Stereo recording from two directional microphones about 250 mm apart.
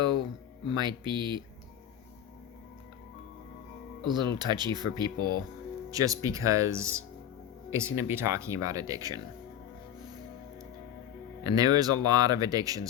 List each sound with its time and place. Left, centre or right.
0.7 s speech: centre
4.0 s speech: centre
11.4 s speech: centre